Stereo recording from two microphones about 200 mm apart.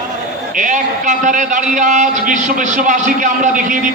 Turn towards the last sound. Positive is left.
turn(degrees=-40)  # may be behind; listen again after turning